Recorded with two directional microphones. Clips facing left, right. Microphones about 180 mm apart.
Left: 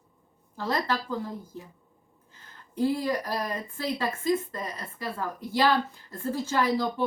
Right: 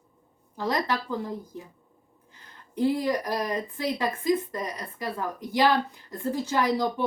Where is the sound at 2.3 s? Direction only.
15° right (ahead or behind).